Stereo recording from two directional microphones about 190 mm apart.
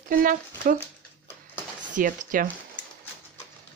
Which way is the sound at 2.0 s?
45° right (ahead or behind).